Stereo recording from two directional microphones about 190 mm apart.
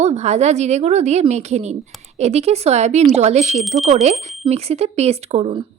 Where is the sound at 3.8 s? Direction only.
35° right (ahead or behind).